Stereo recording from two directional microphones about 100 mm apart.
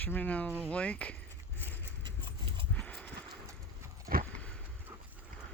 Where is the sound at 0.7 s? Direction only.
15° left (ahead or behind).